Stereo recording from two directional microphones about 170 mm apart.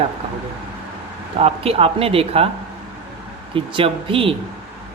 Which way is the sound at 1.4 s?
35° right (ahead or behind).